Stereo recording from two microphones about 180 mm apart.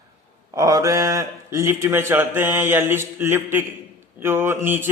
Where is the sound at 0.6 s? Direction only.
20° right (ahead or behind).